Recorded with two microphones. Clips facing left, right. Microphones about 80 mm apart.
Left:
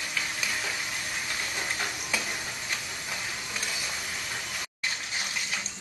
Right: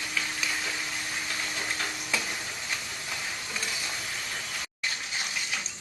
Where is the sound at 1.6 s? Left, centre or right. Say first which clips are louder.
Even; centre.